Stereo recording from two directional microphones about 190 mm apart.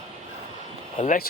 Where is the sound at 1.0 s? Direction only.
45° left (ahead or behind).